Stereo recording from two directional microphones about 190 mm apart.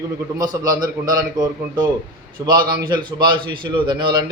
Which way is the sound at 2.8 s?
25° right (ahead or behind).